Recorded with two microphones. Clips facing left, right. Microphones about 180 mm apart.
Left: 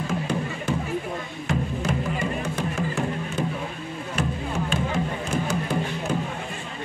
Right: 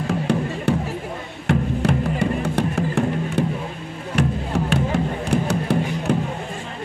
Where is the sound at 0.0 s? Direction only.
70° right (ahead or behind).